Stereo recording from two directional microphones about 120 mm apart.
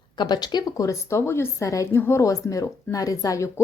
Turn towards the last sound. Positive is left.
turn(degrees=25)  # may be behind; listen again after turning